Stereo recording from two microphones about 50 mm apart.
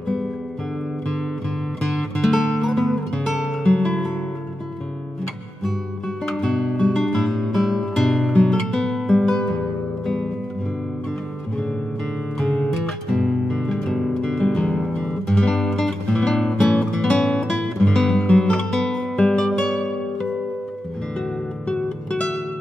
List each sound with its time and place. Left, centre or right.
2.2 s guitar: centre
3.6 s music: centre
6.2 s music: centre
7.5 s music: centre
12.4 s music: centre
12.6 s music: centre
15.7 s music: centre
17.8 s music: centre
21.6 s music: centre